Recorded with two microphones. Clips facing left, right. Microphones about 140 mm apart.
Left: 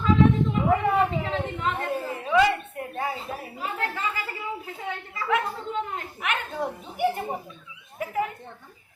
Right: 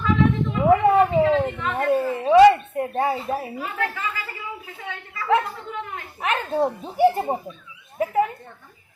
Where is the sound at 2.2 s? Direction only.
35° right (ahead or behind).